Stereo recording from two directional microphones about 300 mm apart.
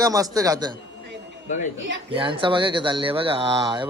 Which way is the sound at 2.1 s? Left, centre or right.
Centre.